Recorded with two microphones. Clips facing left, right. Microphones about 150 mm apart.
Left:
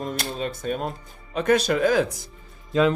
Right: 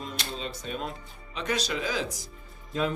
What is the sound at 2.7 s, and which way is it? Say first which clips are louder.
Speech: left 9 dB; 90° left.